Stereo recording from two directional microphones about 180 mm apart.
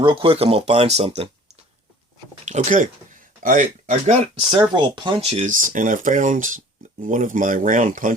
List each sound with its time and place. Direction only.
0.0 s speech: 30° right (ahead or behind)
2.4 s speech: 40° right (ahead or behind)
4.5 s speech: 25° right (ahead or behind)
5.3 s speech: 45° right (ahead or behind)